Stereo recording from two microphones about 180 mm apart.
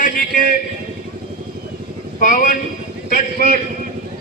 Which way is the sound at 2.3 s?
45° left (ahead or behind).